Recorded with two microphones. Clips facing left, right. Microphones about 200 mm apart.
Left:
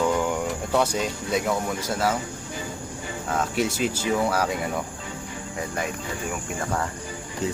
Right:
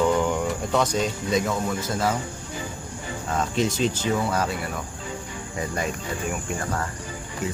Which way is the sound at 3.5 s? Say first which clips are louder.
Right 3 dB; 10° left (ahead or behind).